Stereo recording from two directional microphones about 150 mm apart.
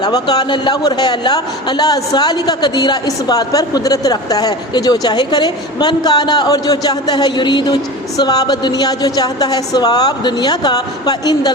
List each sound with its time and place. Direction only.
0.0 s speech: 25° left (ahead or behind)